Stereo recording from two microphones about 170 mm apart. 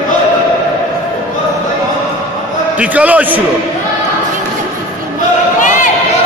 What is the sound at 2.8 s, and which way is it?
Speech, 10° right (ahead or behind).